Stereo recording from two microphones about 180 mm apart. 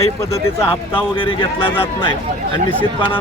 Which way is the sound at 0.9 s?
30° left (ahead or behind).